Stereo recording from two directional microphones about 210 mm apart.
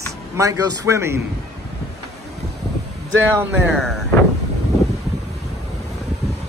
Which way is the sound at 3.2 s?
10° right (ahead or behind).